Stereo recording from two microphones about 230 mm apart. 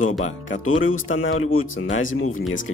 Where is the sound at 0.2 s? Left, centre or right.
Left.